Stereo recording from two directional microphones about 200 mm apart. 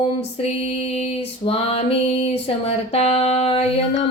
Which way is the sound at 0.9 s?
30° left (ahead or behind).